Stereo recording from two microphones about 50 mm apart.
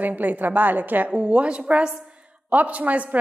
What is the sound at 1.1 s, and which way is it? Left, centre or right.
A woman's voice, right.